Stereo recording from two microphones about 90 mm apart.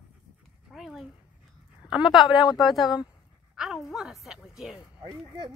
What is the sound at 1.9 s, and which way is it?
A woman's voice, 5° right (ahead or behind).